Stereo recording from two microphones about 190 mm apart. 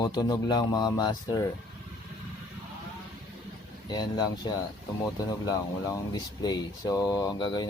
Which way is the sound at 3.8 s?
20° left (ahead or behind).